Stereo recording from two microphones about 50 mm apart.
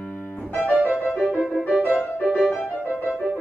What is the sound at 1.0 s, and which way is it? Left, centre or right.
Music, centre.